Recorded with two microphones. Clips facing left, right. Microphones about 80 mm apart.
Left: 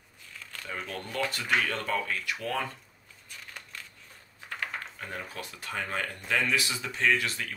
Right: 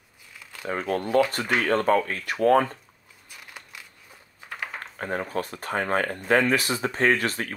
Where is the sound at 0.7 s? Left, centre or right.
Right.